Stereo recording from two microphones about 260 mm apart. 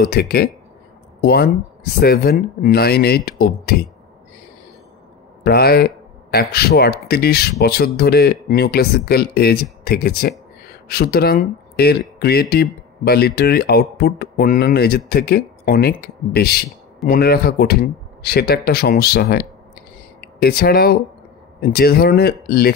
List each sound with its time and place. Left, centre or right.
0.0 s speech: left
5.4 s speech: left